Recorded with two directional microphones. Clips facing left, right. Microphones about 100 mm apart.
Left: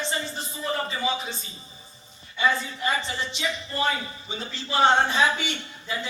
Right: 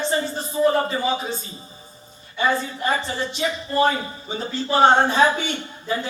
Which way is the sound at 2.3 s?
45° right (ahead or behind).